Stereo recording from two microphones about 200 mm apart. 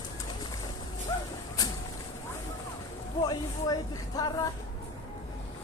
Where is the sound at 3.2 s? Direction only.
20° left (ahead or behind).